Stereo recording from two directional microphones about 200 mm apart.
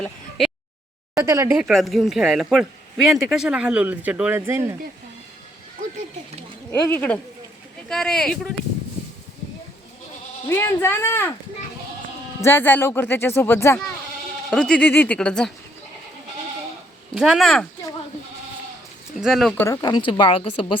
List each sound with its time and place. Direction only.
0.0 s a sound: centre (ahead or behind)
1.1 s speech: 15° right (ahead or behind)
6.7 s speech: 10° left (ahead or behind)
10.5 s speech: 10° left (ahead or behind)
12.4 s speech: 10° left (ahead or behind)
17.2 s speech: centre (ahead or behind)
19.2 s speech: centre (ahead or behind)
19.6 s speech: 15° left (ahead or behind)